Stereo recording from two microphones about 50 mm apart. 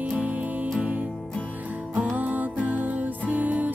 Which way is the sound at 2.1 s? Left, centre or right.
Right.